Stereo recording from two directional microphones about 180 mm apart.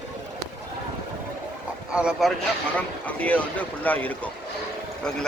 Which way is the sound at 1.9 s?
5° right (ahead or behind).